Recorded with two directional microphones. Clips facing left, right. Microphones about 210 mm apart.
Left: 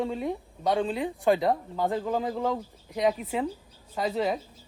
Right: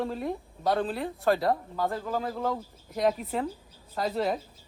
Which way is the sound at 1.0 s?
15° left (ahead or behind).